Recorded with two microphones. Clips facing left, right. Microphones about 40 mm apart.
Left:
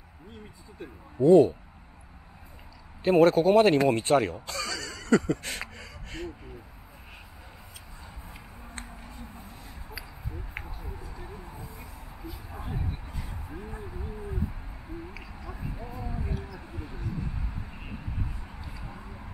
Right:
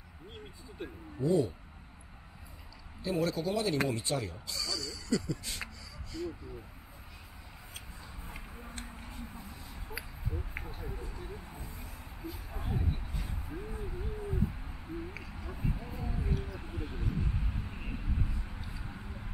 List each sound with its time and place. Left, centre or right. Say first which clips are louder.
1.2 s speech: left 12 dB; left
3.0 s speech: left 12 dB; left
11.2 s a sound: left 3 dB; centre
13.2 s owl: left 1 dB; centre
16.0 s a sound: left 2 dB; centre
16.8 s vehicle: even; centre
17.6 s vehicle: even; centre